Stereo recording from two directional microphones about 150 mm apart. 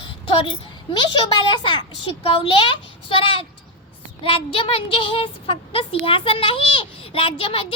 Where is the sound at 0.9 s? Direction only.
30° left (ahead or behind).